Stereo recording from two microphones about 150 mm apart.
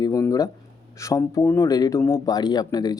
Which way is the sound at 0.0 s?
20° left (ahead or behind).